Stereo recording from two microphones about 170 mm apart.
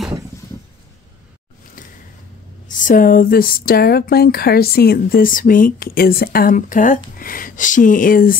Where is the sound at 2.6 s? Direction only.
50° left (ahead or behind).